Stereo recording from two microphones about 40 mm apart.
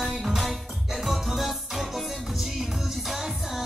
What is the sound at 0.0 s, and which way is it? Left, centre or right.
Music, centre.